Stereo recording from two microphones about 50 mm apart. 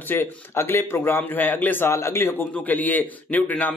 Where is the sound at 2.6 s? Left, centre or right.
Left.